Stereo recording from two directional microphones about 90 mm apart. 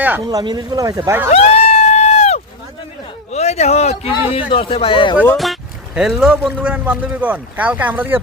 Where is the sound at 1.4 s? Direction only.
90° left.